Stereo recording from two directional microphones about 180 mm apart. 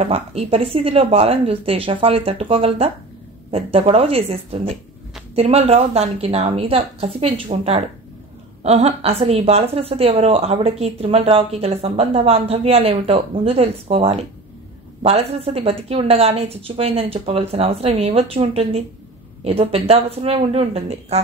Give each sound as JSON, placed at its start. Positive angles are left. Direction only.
{"t": 0.0, "sound": "a woman's voice", "side_deg": -35}